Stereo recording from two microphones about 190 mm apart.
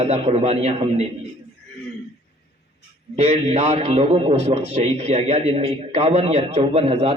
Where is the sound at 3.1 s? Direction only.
35° right (ahead or behind).